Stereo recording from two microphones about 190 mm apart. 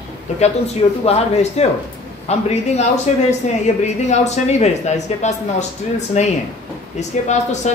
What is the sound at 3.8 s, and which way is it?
A woman's voice, 35° left (ahead or behind).